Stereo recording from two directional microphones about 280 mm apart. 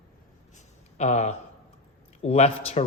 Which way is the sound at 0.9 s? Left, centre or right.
Left.